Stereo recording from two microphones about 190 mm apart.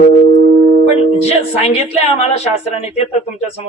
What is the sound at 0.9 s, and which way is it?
Music, 35° left (ahead or behind).